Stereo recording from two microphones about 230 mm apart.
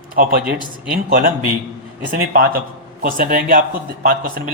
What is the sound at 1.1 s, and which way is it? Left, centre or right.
A man's voice, right.